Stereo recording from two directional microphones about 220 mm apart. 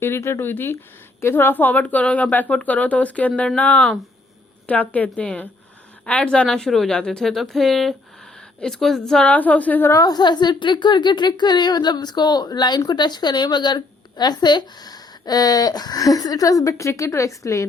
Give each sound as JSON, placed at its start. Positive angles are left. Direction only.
{"t": 0.0, "sound": "a woman's voice", "side_deg": 10}